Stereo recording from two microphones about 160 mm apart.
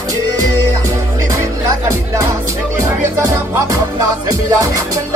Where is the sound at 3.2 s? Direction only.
20° right (ahead or behind).